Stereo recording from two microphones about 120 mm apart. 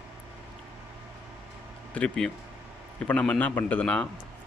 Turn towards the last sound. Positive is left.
turn(degrees=10)  # may be behind; listen again after turning